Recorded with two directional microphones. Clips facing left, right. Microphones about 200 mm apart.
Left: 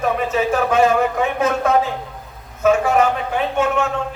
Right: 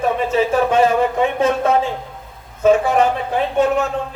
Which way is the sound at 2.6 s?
30° right (ahead or behind).